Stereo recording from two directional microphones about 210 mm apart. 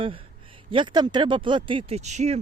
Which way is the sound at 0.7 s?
20° right (ahead or behind).